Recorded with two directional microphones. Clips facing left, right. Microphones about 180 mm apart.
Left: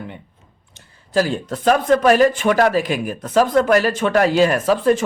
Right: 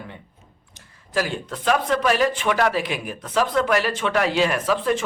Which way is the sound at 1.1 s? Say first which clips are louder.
Left 6 dB; 35° left (ahead or behind).